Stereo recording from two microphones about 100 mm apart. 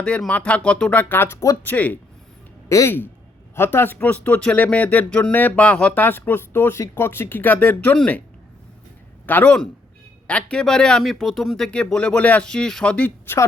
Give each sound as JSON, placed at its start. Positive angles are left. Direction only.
{"t": 0.3, "sound": "speech", "side_deg": 15}
{"t": 2.6, "sound": "speech", "side_deg": 30}
{"t": 9.2, "sound": "speech", "side_deg": 15}